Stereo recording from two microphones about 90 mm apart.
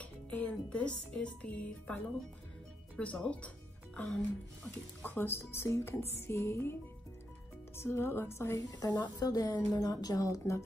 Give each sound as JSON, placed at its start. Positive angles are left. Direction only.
{"t": 0.0, "sound": "speech", "side_deg": 15}
{"t": 3.0, "sound": "speech", "side_deg": 15}
{"t": 4.6, "sound": "speech", "side_deg": 20}
{"t": 8.7, "sound": "a woman's voice", "side_deg": 45}